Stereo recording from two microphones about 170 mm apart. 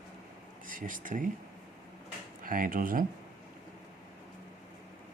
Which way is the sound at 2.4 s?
55° right (ahead or behind).